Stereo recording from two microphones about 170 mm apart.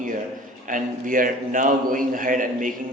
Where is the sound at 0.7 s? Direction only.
55° right (ahead or behind).